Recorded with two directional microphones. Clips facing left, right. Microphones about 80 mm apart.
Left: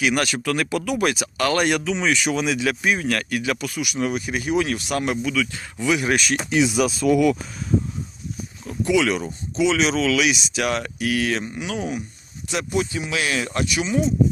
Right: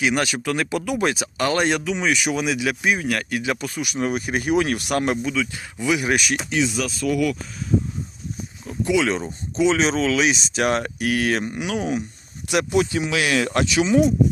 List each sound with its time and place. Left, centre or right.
0.0 s speech: centre; by 5.1 s right
5.1 s speech: right
6.4 s speech: centre
8.8 s speech: right
9.6 s speech: right